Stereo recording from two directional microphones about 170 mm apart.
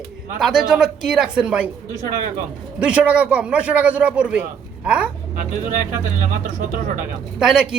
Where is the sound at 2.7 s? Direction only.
5° right (ahead or behind).